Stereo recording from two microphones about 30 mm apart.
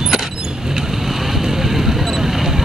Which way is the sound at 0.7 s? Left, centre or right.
Centre.